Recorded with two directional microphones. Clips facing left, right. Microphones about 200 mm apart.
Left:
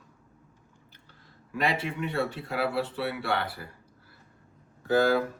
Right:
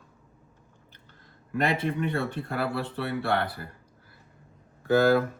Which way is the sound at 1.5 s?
50° right (ahead or behind).